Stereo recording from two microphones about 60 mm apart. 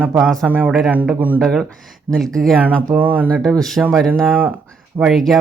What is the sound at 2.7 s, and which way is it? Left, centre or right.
Speech, right.